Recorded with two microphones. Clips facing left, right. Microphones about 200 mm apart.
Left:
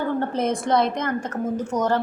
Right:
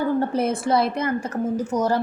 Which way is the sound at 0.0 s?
10° right (ahead or behind).